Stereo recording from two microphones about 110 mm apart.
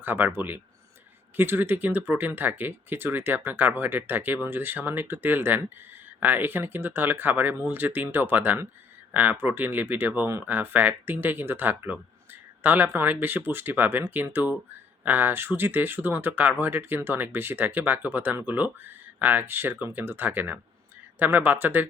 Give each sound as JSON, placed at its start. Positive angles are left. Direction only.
{"t": 0.0, "sound": "speech", "side_deg": -15}